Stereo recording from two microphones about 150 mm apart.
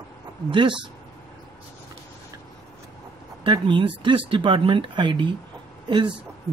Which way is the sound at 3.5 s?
35° right (ahead or behind).